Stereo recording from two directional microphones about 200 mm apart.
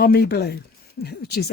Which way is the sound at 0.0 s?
50° left (ahead or behind).